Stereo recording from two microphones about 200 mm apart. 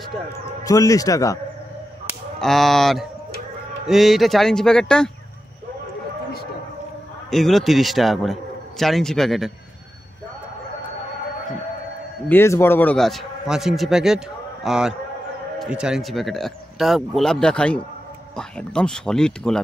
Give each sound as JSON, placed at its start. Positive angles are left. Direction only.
{"t": 0.7, "sound": "a man's voice", "side_deg": 15}
{"t": 2.3, "sound": "speech", "side_deg": 0}
{"t": 7.2, "sound": "speech", "side_deg": 0}
{"t": 12.3, "sound": "speech", "side_deg": 10}